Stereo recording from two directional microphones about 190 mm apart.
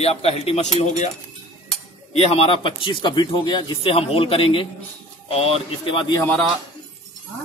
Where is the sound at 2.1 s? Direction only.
30° left (ahead or behind).